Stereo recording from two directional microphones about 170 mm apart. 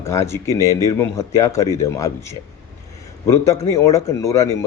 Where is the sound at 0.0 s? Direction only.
15° left (ahead or behind).